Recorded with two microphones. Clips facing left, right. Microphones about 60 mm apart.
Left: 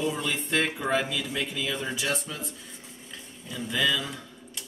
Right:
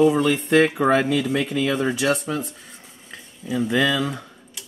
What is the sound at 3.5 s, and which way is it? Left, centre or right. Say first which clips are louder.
Speech: right 7 dB; right.